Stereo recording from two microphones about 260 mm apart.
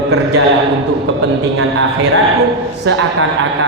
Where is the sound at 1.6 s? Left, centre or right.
Right.